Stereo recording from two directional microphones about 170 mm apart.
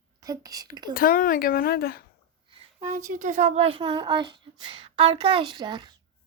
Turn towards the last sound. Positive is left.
turn(degrees=-25)  # may be behind; listen again after turning